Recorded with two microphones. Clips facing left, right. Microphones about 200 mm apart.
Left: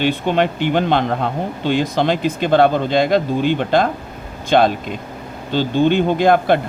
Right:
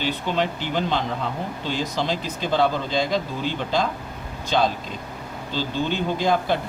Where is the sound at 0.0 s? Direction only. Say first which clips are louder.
Left 7 dB; 60° left (ahead or behind).